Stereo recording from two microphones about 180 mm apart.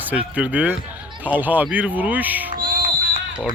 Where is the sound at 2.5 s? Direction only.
50° right (ahead or behind).